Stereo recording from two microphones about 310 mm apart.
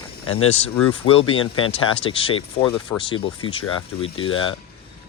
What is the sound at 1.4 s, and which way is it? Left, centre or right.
Speech, left.